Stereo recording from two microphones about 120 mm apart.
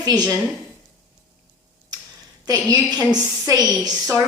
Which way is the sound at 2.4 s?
35° right (ahead or behind).